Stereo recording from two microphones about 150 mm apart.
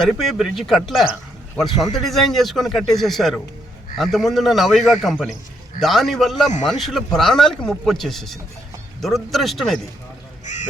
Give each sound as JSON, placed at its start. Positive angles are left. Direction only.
{"t": 0.0, "sound": "a man's voice", "side_deg": 0}
{"t": 10.4, "sound": "duck", "side_deg": 55}